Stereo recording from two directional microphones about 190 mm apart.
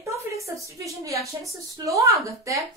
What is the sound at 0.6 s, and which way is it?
A woman's voice, 15° right (ahead or behind).